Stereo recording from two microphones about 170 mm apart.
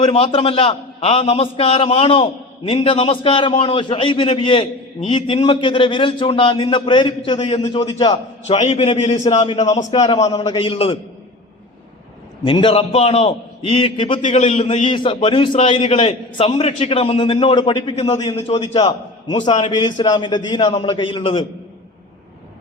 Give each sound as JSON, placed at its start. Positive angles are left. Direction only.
{"t": 0.0, "sound": "a man's voice", "side_deg": 30}
{"t": 9.6, "sound": "a man's voice", "side_deg": 20}
{"t": 12.5, "sound": "a man's voice", "side_deg": 30}
{"t": 14.2, "sound": "a man's voice", "side_deg": 45}
{"t": 14.8, "sound": "a man's voice", "side_deg": 30}
{"t": 19.6, "sound": "a man's voice", "side_deg": 25}